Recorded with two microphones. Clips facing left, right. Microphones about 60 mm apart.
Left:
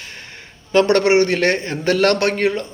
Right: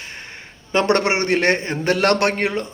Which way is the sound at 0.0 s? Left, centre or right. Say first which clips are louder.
Right 1 dB; right.